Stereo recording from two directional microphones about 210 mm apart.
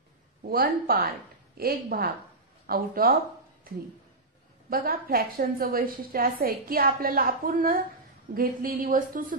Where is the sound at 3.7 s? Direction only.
45° right (ahead or behind).